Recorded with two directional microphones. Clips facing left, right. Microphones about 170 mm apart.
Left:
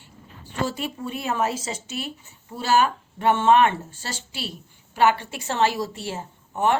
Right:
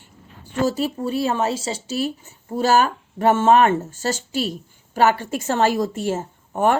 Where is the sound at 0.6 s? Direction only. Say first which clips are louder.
Right 6 dB; 40° right (ahead or behind).